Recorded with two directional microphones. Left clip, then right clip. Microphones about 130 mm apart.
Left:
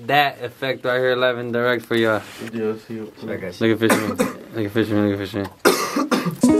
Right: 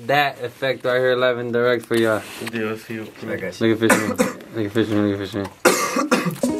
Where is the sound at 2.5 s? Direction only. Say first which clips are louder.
Left 1 dB; 40° right (ahead or behind).